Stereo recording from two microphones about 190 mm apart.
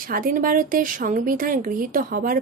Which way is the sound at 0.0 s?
45° right (ahead or behind).